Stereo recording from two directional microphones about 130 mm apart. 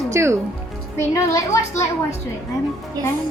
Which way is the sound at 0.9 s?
20° left (ahead or behind).